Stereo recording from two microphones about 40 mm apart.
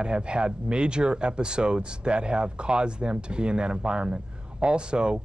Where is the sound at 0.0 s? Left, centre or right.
Right.